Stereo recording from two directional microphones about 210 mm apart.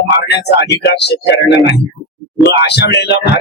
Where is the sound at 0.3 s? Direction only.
50° left (ahead or behind).